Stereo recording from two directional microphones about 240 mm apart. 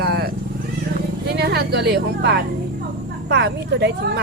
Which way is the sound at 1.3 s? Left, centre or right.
Right.